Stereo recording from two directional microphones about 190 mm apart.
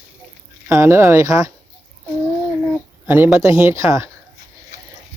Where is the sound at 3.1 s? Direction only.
10° right (ahead or behind).